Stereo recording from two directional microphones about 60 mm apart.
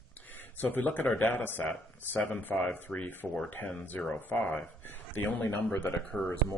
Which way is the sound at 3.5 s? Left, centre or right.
Left.